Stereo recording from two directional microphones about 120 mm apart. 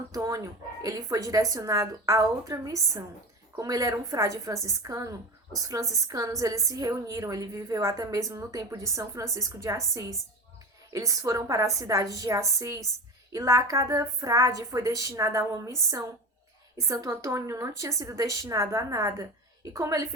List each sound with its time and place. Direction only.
0.1 s a woman's voice: 30° right (ahead or behind)